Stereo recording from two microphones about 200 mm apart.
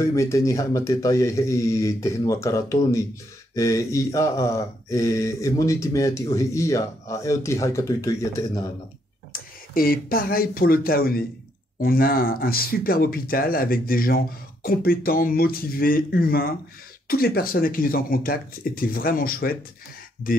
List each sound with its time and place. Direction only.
0.0 s speech: 15° left (ahead or behind)
9.3 s speech: 45° left (ahead or behind)